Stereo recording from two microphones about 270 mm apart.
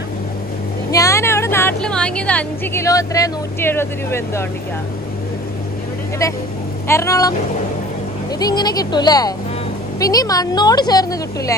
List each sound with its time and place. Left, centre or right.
0.9 s a woman's voice: centre
6.9 s a woman's voice: centre
8.4 s a woman's voice: centre